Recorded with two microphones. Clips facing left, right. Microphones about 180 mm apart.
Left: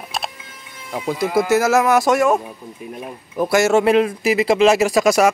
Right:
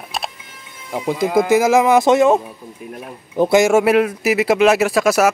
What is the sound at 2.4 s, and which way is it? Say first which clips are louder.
Speech: even; 5° left (ahead or behind).